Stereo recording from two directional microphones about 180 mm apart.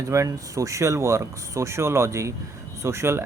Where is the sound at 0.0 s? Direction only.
15° right (ahead or behind).